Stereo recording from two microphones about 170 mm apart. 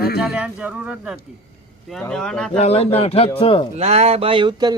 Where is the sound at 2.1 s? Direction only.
5° left (ahead or behind).